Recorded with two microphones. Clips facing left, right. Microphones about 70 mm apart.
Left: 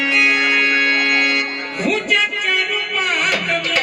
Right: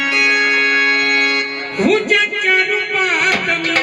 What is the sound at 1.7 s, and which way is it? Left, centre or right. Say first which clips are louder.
Music: right 5 dB; right.